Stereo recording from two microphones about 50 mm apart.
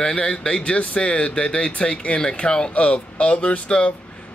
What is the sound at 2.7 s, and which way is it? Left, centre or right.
Speech, left.